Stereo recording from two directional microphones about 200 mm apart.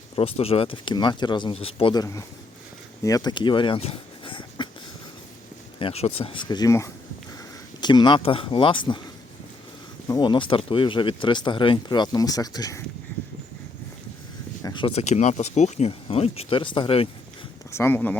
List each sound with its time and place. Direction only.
0.2 s speech: 30° left (ahead or behind)
5.8 s speech: 30° left (ahead or behind)
10.1 s speech: 20° left (ahead or behind)
14.6 s speech: 25° left (ahead or behind)
17.7 s speech: 10° left (ahead or behind)